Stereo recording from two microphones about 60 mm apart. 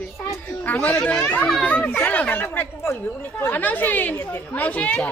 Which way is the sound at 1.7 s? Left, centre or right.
Left.